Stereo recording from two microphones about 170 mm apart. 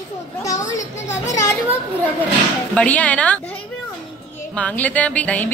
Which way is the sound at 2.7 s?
10° left (ahead or behind).